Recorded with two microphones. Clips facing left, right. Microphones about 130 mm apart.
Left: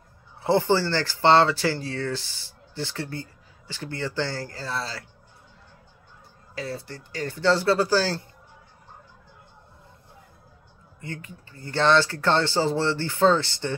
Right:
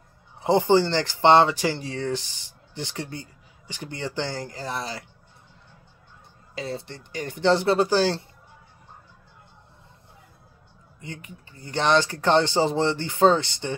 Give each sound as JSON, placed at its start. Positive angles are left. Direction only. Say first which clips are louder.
{"t": 0.4, "sound": "speech", "louder": "right 2 dB", "side_deg": -15}
{"t": 6.5, "sound": "speech", "louder": "right 1 dB", "side_deg": -20}
{"t": 11.0, "sound": "speech", "louder": "left 2 dB", "side_deg": -20}